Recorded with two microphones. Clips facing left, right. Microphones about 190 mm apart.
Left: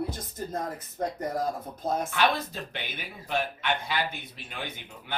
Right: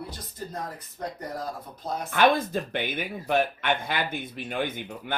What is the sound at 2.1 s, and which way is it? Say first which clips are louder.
Speech: right 5 dB; 50° right (ahead or behind).